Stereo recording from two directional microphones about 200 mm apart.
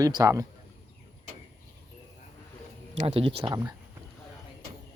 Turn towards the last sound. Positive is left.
turn(degrees=-30)  # may be behind; listen again after turning